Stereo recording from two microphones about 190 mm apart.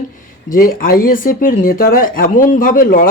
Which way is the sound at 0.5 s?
50° left (ahead or behind).